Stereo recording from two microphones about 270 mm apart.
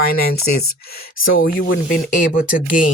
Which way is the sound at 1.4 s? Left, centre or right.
Left.